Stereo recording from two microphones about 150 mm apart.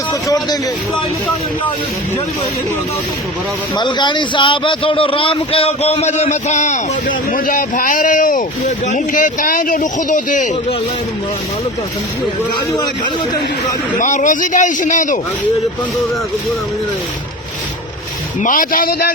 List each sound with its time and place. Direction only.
0.1 s a sound: 25° left (ahead or behind)
3.8 s a man's voice: 30° left (ahead or behind); by 10.5 s 60° left (ahead or behind)
14.0 s a man's voice: 55° left (ahead or behind)
18.4 s a man's voice: 65° left (ahead or behind); by 19.1 s 90° left